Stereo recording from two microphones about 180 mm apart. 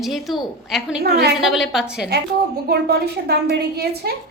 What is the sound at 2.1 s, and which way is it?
A woman's voice, 65° right (ahead or behind).